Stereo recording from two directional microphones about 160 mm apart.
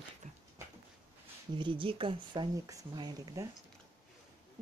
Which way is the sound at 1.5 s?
30° right (ahead or behind).